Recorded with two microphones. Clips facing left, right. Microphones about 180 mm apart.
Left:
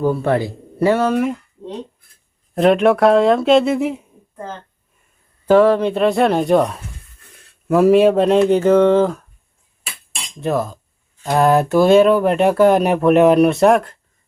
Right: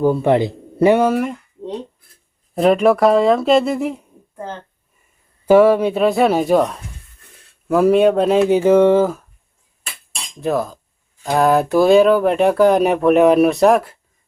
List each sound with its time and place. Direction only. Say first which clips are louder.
0.0 s a man's voice: right 3 dB; 15° right (ahead or behind)
1.1 s speech: left 2 dB; centre (ahead or behind)
2.6 s speech: even; centre (ahead or behind)
5.5 s speech: right 1 dB; 10° right (ahead or behind)
10.4 s speech: even; centre (ahead or behind)